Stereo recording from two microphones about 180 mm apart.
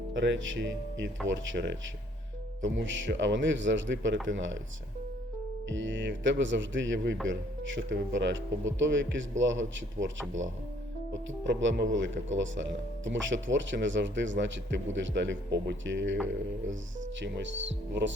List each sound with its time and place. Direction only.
0.1 s speech: 90° right
5.6 s speech: 90° right
17.2 s speech: 80° right